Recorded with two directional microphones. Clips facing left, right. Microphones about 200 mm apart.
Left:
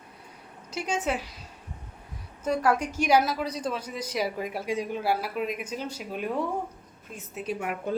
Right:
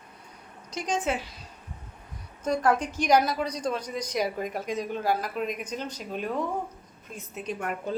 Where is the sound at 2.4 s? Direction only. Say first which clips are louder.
Even; 5° left (ahead or behind).